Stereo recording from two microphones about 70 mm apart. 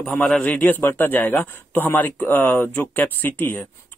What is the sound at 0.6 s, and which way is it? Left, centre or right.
Speech, left.